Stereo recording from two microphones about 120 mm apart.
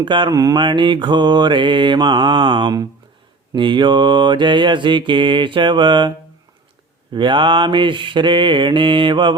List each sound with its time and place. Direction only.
0.0 s mantra: 40° right (ahead or behind)